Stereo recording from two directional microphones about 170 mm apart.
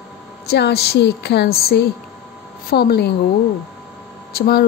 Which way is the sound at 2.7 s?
75° left (ahead or behind).